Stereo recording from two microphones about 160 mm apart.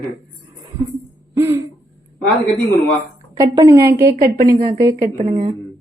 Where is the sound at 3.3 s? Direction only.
25° right (ahead or behind).